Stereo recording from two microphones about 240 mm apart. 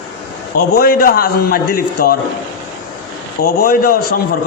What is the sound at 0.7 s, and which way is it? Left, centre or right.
A man's voice, left.